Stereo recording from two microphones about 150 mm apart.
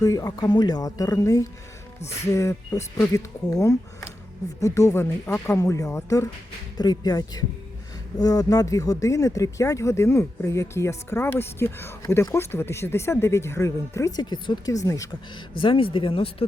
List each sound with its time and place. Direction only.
0.0 s speech: 25° left (ahead or behind)
15.5 s speech: 35° left (ahead or behind)